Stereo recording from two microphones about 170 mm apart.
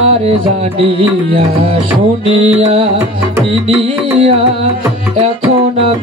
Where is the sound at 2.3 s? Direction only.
35° right (ahead or behind).